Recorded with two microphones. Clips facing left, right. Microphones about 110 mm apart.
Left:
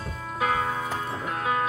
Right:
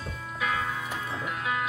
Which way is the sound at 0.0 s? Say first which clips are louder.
Left 4 dB; 40° left (ahead or behind).